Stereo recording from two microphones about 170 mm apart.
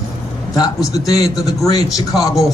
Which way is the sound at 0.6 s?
20° left (ahead or behind).